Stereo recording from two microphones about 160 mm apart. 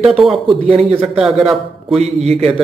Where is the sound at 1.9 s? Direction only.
40° right (ahead or behind).